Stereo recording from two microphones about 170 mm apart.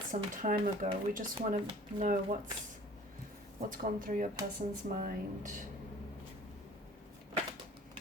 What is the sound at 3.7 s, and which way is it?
Speech, 55° right (ahead or behind).